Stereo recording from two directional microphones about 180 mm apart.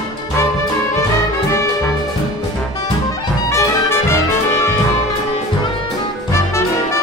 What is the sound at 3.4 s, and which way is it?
Music, 15° left (ahead or behind).